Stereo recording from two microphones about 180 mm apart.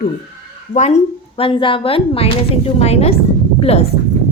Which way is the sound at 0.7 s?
40° left (ahead or behind).